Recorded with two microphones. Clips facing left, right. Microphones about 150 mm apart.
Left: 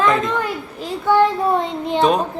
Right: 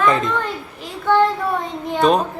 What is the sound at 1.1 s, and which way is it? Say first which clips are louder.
Child singing: left 1 dB; 10° left (ahead or behind).